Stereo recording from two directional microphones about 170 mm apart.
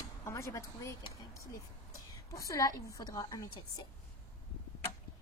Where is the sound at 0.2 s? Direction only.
15° left (ahead or behind).